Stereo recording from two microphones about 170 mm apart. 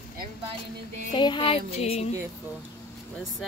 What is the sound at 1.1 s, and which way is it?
Speech, 30° left (ahead or behind).